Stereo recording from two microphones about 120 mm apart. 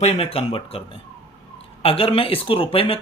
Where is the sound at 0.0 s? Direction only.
60° left (ahead or behind).